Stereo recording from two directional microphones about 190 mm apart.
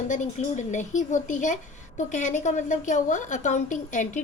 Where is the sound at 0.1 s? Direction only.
40° left (ahead or behind).